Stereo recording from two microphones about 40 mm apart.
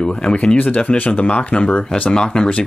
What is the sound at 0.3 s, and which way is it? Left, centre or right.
Speech, left.